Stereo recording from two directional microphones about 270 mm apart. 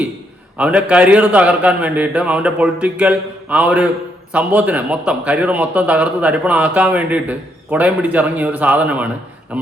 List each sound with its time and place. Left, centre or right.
0.5 s a man's voice: centre